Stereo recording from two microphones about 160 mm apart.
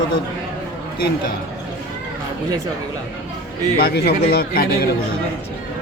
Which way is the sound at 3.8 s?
80° left.